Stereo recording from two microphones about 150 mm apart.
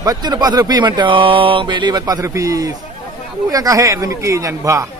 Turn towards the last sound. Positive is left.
turn(degrees=-20)  # may be behind; listen again after turning